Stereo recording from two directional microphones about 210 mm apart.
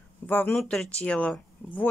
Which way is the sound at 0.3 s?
10° left (ahead or behind).